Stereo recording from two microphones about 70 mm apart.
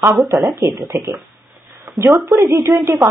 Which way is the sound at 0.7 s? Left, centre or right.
Right.